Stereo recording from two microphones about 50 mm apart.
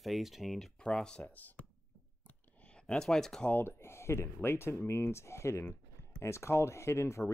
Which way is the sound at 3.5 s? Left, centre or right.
Left.